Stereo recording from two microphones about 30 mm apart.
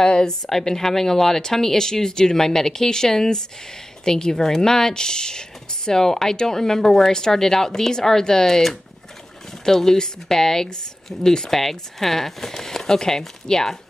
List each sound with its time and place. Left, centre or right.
0.0 s speech: left
9.7 s speech: centre